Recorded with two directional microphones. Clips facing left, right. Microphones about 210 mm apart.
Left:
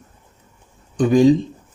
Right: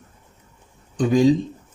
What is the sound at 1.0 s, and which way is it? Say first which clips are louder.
Speech: left 3 dB; 55° left (ahead or behind).